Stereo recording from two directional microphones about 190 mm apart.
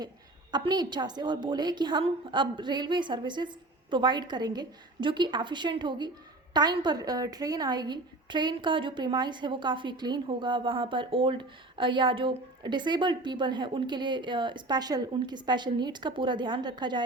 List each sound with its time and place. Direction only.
0.5 s a woman's voice: 20° right (ahead or behind)